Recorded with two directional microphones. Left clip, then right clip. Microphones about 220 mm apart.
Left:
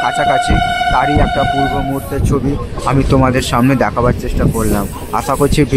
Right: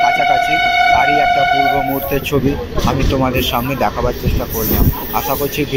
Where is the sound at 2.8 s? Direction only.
30° left (ahead or behind).